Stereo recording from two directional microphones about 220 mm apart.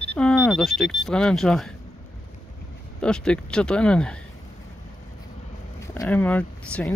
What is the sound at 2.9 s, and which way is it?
Speech, 5° left (ahead or behind).